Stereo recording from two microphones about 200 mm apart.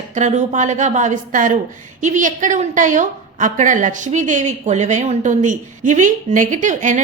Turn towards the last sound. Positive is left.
turn(degrees=-40)  # may be behind; listen again after turning